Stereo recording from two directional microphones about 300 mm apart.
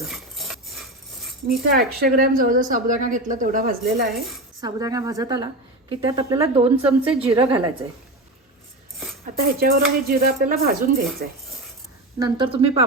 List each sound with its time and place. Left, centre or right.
0.0 s cutlery: centre
2.0 s a woman's voice: right
4.6 s a woman's voice: centre
9.6 s speech: right
12.2 s a woman's voice: centre